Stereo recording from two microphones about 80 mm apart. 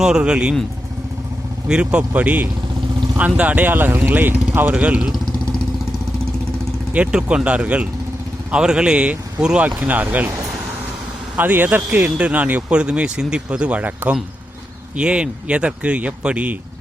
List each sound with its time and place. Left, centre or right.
0.0 s speech: centre
1.6 s speech: centre
6.9 s speech: centre
11.3 s speech: right